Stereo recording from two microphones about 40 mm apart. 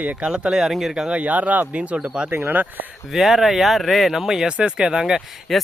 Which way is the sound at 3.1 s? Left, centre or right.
Centre.